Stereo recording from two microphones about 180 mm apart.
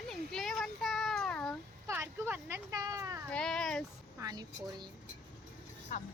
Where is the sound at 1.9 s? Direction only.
15° right (ahead or behind).